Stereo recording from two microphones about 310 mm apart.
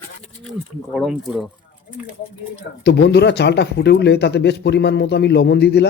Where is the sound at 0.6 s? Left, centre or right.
Centre.